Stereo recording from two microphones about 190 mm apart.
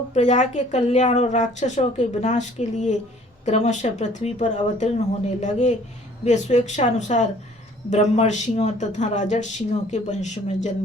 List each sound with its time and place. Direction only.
0.1 s speech: 40° left (ahead or behind)